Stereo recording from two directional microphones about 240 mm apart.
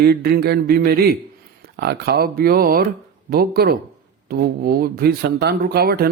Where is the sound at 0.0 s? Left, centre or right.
Right.